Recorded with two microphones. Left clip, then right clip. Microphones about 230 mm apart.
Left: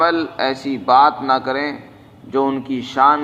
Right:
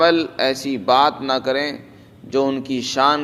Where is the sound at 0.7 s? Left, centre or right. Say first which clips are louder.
Left 4 dB; right.